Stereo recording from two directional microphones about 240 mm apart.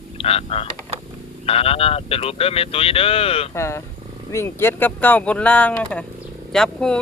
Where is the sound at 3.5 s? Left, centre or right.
Centre.